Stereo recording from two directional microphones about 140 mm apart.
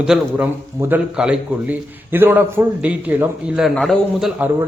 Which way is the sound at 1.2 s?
10° right (ahead or behind).